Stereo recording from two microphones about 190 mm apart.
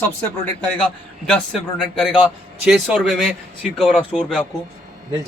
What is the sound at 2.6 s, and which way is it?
Speech, 5° right (ahead or behind).